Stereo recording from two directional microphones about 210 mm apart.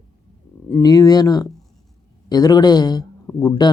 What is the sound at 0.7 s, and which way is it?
Speech, 20° left (ahead or behind).